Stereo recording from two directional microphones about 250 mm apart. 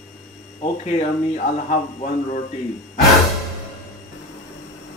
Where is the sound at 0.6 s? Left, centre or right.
Left.